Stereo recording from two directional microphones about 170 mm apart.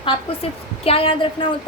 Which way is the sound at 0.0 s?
30° left (ahead or behind).